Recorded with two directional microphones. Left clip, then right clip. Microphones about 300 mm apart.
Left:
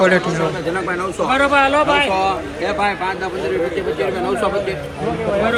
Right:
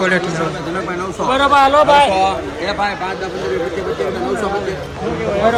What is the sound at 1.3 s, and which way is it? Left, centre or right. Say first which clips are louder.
Speech: right 3 dB; centre.